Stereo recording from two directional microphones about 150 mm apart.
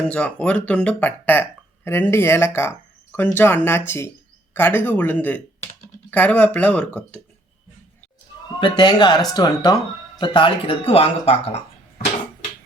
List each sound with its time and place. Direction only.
0.0 s speech: 10° left (ahead or behind)
8.6 s speech: 30° left (ahead or behind)